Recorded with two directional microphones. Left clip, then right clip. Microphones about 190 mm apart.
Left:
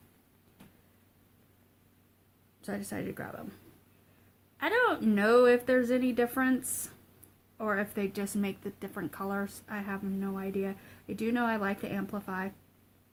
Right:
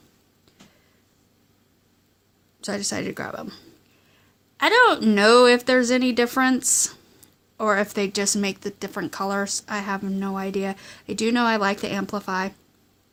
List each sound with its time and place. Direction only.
2.6 s speech: 50° right (ahead or behind)
4.5 s speech: 50° right (ahead or behind)